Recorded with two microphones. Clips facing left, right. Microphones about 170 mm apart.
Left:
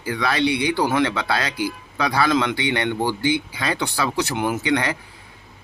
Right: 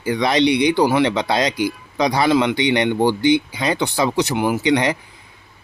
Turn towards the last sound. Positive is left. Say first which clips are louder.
# right 4 dB
turn(degrees=-15)  # may be behind; listen again after turning